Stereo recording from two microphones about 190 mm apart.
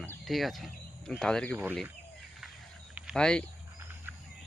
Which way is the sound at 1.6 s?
10° right (ahead or behind).